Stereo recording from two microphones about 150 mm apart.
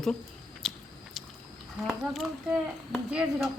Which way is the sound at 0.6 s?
Centre (ahead or behind).